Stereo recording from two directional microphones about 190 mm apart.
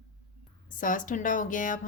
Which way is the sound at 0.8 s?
45° left (ahead or behind).